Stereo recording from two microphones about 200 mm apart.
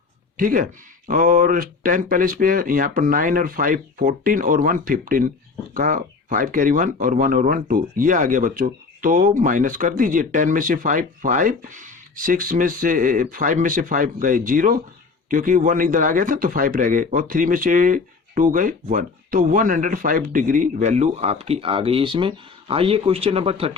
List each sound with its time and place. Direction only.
0.3 s a man's voice: 45° right (ahead or behind)